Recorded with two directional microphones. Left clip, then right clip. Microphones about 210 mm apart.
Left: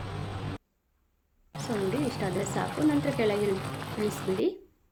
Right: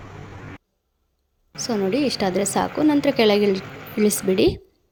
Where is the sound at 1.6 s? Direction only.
35° right (ahead or behind).